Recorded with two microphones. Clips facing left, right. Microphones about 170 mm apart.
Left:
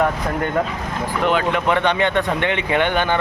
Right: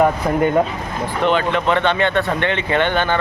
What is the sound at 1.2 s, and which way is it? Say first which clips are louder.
Speech: right 2 dB; 10° left (ahead or behind).